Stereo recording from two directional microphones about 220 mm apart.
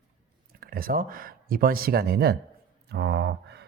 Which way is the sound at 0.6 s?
40° right (ahead or behind).